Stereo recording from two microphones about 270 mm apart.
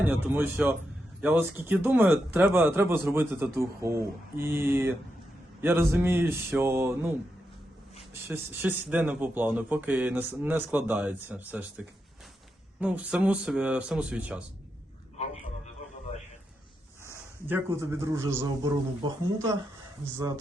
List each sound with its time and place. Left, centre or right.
0.0 s a man's voice: centre
8.1 s a man's voice: centre
15.2 s a sound: left
17.4 s a man's voice: centre